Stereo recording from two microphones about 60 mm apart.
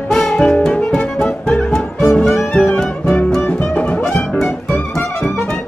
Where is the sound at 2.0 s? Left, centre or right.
Centre.